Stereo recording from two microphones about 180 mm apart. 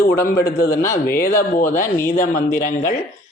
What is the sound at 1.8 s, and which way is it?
Speech, 15° left (ahead or behind).